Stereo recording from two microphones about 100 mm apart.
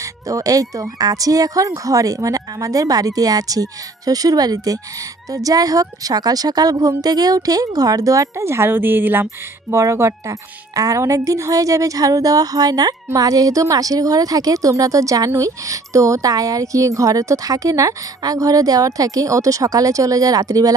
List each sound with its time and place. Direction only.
0.0 s a woman's voice: 35° right (ahead or behind); by 9.8 s 20° right (ahead or behind)
9.8 s a woman's voice: 30° right (ahead or behind)